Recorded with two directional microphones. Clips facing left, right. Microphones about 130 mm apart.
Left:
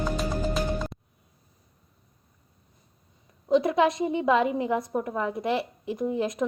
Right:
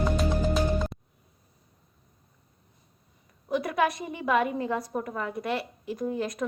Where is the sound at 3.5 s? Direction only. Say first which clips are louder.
Left 5 dB; 25° left (ahead or behind).